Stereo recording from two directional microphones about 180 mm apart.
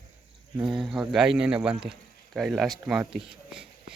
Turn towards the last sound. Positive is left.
turn(degrees=-5)  # may be behind; listen again after turning